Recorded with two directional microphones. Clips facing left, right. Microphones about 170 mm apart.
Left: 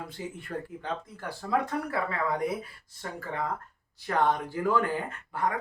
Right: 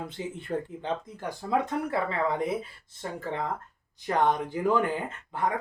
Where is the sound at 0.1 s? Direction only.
25° right (ahead or behind).